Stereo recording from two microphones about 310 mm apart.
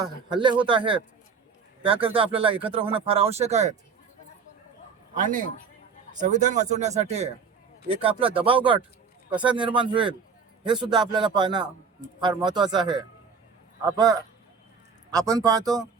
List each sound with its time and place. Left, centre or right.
0.0 s speech: centre
5.1 s speech: right
15.2 s speech: centre
15.6 s music: centre